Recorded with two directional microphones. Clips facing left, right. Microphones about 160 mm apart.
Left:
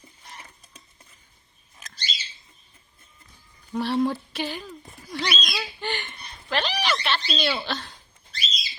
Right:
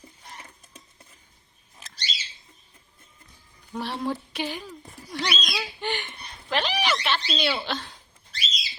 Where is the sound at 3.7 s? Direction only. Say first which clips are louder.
Left 7 dB; centre (ahead or behind).